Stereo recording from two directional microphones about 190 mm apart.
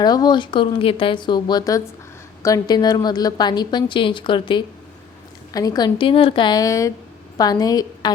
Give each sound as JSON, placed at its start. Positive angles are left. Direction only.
{"t": 0.0, "sound": "a woman's voice", "side_deg": 20}